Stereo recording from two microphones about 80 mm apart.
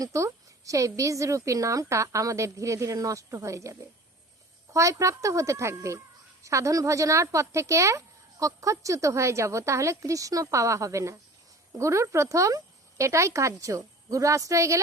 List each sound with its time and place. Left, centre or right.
0.0 s a woman's voice: right